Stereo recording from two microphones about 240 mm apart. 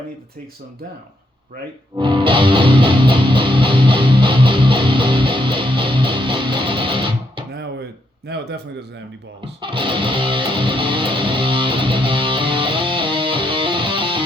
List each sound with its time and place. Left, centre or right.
2.0 s music: centre
7.5 s a sound: right
8.3 s a man's voice: right
9.6 s music: right